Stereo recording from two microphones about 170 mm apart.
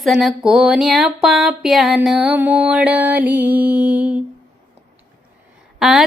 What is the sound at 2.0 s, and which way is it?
Music, centre (ahead or behind).